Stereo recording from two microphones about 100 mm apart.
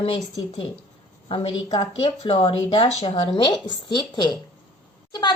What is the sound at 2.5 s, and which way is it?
Speech, 65° left (ahead or behind).